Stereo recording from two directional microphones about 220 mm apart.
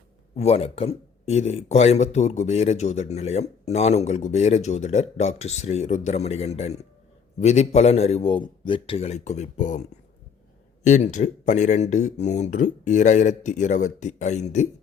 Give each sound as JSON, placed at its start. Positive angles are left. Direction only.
{"t": 0.3, "sound": "speech", "side_deg": 30}
{"t": 10.8, "sound": "speech", "side_deg": 35}